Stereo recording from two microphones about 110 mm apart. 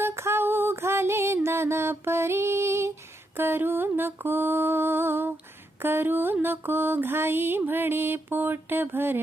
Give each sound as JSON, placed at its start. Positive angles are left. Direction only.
{"t": 0.0, "sound": "music", "side_deg": -25}
{"t": 3.3, "sound": "mantra", "side_deg": -20}